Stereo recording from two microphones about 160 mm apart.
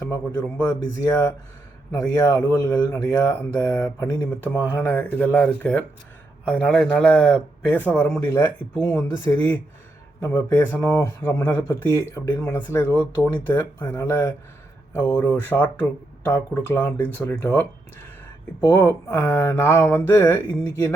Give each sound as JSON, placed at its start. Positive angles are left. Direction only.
{"t": 0.0, "sound": "a man's voice", "side_deg": 20}
{"t": 1.9, "sound": "speech", "side_deg": 15}
{"t": 18.7, "sound": "speech", "side_deg": 15}